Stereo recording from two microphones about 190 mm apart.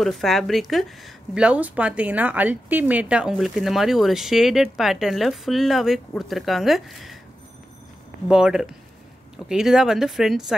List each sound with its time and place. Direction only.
0.0 s speech: centre (ahead or behind)
8.3 s speech: 5° right (ahead or behind)